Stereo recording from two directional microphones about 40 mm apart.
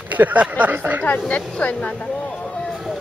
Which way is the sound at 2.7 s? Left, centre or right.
Centre.